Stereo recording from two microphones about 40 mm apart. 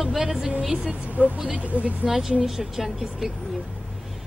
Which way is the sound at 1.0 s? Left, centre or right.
Right.